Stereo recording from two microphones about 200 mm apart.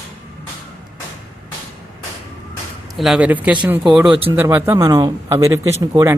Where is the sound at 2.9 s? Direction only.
Centre (ahead or behind).